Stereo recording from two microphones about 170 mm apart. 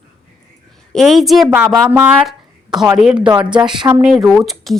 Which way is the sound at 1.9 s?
10° right (ahead or behind).